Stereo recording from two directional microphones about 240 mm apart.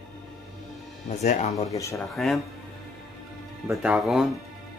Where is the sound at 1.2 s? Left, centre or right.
Left.